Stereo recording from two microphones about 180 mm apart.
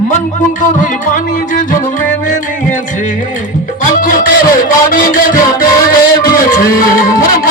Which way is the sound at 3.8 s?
50° left (ahead or behind).